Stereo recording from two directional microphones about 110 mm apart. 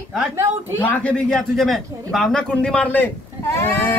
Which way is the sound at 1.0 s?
5° left (ahead or behind).